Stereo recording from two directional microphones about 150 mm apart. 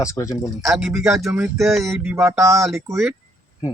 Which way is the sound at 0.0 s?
20° left (ahead or behind).